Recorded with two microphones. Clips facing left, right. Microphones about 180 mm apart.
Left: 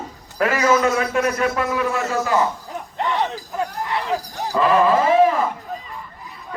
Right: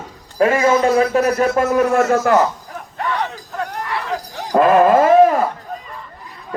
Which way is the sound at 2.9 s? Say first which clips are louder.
Even; 20° left (ahead or behind).